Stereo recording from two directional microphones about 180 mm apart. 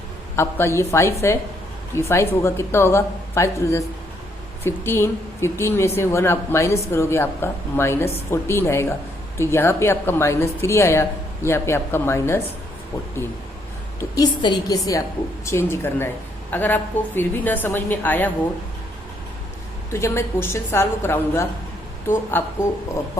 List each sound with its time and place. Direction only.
0.3 s a woman's voice: 15° left (ahead or behind)
14.0 s a woman's voice: 20° left (ahead or behind)
19.9 s a woman's voice: 15° left (ahead or behind)